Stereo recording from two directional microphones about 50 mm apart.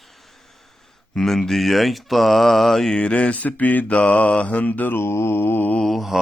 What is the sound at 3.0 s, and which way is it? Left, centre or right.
Mantra, left.